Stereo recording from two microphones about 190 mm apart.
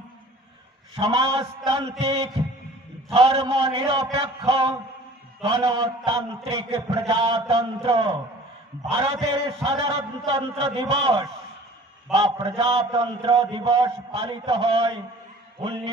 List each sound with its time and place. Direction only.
0.9 s a man's voice: 25° right (ahead or behind)